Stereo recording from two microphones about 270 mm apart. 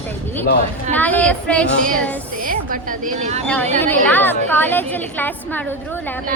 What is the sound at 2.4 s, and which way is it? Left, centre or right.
Speech, right.